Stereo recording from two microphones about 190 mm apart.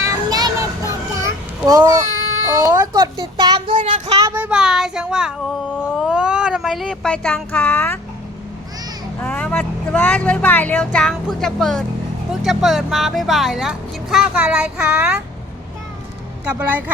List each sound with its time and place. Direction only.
0.0 s child singing: 20° right (ahead or behind)
1.1 s children playing: 15° right (ahead or behind)
2.5 s speech: 15° right (ahead or behind)
3.8 s child singing: 40° right (ahead or behind)
4.0 s speech: 20° right (ahead or behind); by 7.9 s 10° left (ahead or behind)
9.2 s speech: 5° left (ahead or behind)
16.5 s a woman's voice: 10° right (ahead or behind)